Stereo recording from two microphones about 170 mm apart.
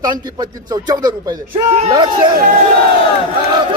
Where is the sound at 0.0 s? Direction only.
25° right (ahead or behind).